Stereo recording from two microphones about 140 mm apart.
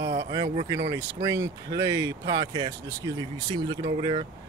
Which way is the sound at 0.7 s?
25° right (ahead or behind).